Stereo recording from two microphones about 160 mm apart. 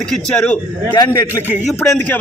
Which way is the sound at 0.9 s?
25° left (ahead or behind).